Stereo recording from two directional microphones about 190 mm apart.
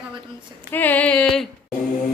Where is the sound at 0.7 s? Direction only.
10° left (ahead or behind).